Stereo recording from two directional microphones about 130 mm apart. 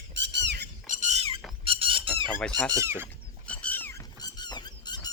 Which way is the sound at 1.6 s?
45° right (ahead or behind).